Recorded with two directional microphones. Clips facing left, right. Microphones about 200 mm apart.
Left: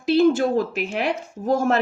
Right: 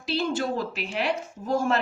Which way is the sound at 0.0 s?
50° left (ahead or behind).